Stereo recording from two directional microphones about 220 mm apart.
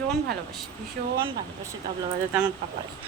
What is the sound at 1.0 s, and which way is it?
Speech, 50° right (ahead or behind).